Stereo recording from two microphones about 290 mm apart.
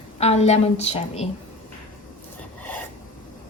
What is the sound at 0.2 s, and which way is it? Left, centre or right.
A woman's voice, left.